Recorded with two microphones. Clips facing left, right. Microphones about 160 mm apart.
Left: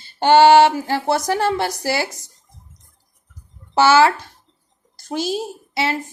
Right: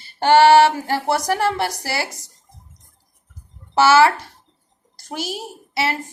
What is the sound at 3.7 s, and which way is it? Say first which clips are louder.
Speech: even; 15° left (ahead or behind).